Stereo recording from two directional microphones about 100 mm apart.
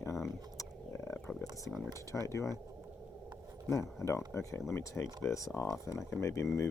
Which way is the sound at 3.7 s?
30° left (ahead or behind).